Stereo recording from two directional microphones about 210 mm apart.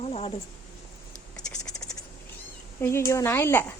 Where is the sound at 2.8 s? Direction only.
15° left (ahead or behind).